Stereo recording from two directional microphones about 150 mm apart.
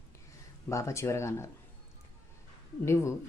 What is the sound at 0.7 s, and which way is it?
Speech, 20° left (ahead or behind).